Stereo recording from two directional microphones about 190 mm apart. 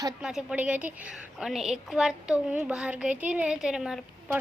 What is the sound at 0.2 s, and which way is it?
A woman's voice, 5° right (ahead or behind).